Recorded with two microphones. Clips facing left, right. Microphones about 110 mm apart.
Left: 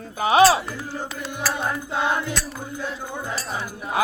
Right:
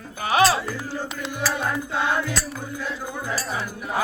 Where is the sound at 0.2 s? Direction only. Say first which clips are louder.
Left 4 dB; 25° left (ahead or behind).